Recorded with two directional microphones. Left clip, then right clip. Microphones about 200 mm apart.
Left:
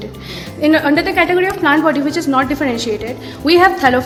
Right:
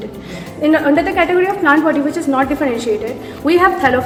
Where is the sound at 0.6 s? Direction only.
55° left (ahead or behind).